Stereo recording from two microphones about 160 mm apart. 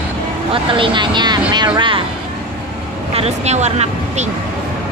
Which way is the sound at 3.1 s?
40° right (ahead or behind).